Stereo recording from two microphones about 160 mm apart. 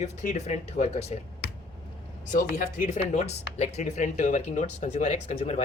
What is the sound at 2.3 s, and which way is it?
Speech, 60° left (ahead or behind).